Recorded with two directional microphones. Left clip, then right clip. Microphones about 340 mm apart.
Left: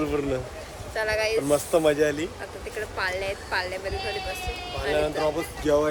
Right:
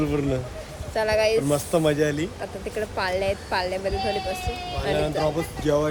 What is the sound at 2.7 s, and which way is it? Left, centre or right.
Speech, centre.